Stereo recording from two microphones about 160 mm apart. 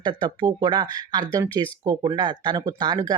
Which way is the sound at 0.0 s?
30° right (ahead or behind).